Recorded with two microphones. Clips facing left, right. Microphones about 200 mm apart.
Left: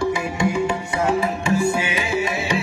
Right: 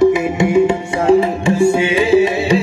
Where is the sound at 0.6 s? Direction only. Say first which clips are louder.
Right 7 dB; 30° right (ahead or behind).